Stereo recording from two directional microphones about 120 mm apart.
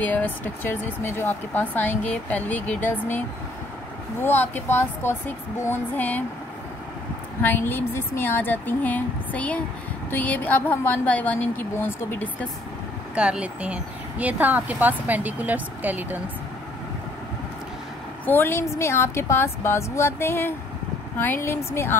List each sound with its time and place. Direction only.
0.0 s speech: 15° left (ahead or behind)
7.4 s speech: 20° left (ahead or behind)
13.1 s speech: 10° right (ahead or behind)
18.2 s a woman's voice: 15° left (ahead or behind)